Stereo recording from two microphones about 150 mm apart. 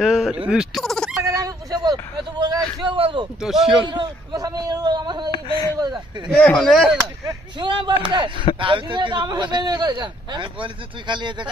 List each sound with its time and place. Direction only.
0.0 s speech: centre (ahead or behind)
0.5 s fowl: centre (ahead or behind)
1.2 s a sound: 20° right (ahead or behind)
2.8 s speech: 35° right (ahead or behind)
3.3 s speech: centre (ahead or behind)
3.8 s a man's voice: 30° right (ahead or behind)
5.3 s a sound: 35° left (ahead or behind)
5.8 s speech: 30° right (ahead or behind)
6.3 s speech: 5° left (ahead or behind)
7.2 s a man's voice: 30° right (ahead or behind)